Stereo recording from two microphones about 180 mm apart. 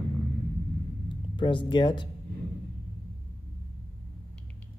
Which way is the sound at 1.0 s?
25° left (ahead or behind).